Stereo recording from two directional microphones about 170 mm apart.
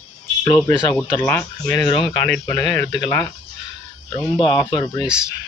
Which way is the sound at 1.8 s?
30° left (ahead or behind).